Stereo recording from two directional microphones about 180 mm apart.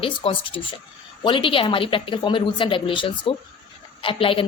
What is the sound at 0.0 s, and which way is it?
A woman's voice, 30° left (ahead or behind).